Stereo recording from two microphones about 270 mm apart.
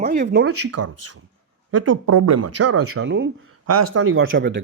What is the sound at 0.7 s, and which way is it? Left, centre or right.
Speech, right.